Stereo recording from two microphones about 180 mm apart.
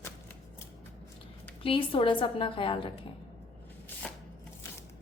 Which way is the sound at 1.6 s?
30° left (ahead or behind).